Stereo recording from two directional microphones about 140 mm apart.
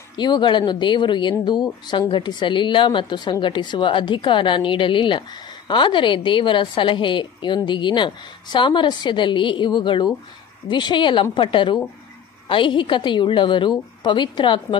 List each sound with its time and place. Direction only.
0.2 s a woman's voice: 35° left (ahead or behind)